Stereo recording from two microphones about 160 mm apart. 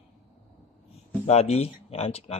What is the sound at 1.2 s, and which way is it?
A man's voice, 40° left (ahead or behind).